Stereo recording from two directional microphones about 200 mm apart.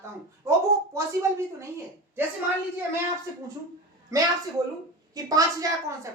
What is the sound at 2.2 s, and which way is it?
Speech, 10° right (ahead or behind).